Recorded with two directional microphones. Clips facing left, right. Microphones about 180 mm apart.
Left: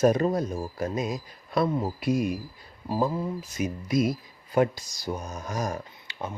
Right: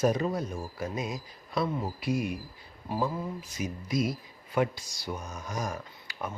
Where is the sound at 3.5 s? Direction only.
55° left (ahead or behind); by 5.8 s 40° left (ahead or behind).